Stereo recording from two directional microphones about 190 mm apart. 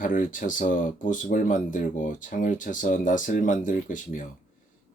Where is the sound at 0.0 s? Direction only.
45° left (ahead or behind).